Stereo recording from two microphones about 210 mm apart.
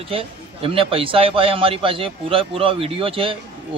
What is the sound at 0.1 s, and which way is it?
A man's voice, 25° right (ahead or behind).